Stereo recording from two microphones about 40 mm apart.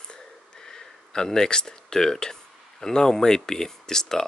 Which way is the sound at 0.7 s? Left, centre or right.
Centre.